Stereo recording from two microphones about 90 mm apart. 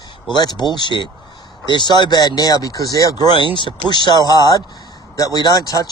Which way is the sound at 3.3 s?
65° left (ahead or behind).